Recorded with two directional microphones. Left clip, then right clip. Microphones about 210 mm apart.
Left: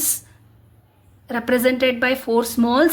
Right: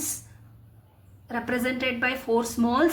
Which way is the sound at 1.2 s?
40° left (ahead or behind).